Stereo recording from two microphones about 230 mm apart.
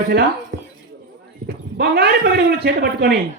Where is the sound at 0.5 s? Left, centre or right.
Right.